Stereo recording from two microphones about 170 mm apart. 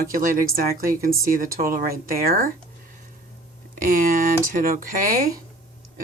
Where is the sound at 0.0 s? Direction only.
55° right (ahead or behind).